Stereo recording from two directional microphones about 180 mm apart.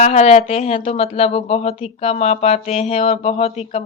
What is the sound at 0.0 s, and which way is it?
Speech, 40° left (ahead or behind).